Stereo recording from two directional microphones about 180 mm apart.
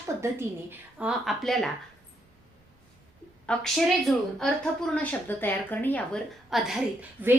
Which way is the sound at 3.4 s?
5° left (ahead or behind).